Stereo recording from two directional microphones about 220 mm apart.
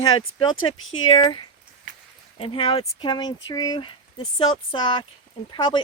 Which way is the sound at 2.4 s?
25° left (ahead or behind).